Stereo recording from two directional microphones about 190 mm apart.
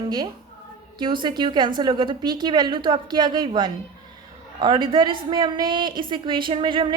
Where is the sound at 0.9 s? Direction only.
25° right (ahead or behind).